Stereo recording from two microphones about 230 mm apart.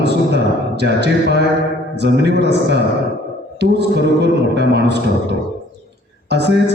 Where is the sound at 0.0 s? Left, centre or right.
Right.